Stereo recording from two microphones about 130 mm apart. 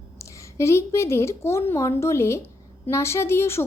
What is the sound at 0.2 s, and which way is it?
A woman's voice, 25° left (ahead or behind).